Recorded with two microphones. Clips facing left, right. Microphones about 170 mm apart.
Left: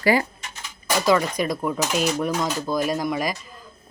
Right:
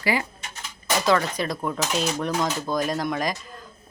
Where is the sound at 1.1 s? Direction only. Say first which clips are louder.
Left 3 dB; 10° left (ahead or behind).